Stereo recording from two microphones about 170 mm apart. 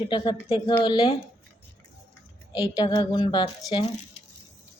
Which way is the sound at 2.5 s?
25° left (ahead or behind).